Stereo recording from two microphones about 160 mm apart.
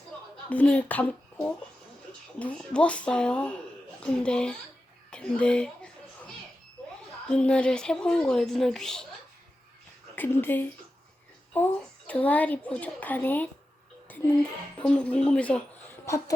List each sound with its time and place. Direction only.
0.5 s speech: 10° left (ahead or behind)
7.3 s speech: 5° left (ahead or behind)
10.2 s a woman's voice: 15° left (ahead or behind)
14.1 s music: 10° left (ahead or behind)
14.8 s speech: 10° left (ahead or behind)
16.0 s speech: 20° left (ahead or behind)